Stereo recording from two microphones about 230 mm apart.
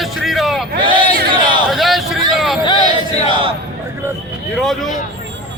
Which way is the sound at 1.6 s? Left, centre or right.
Centre.